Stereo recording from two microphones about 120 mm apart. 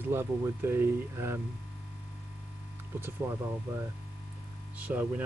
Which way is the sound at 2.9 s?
20° right (ahead or behind).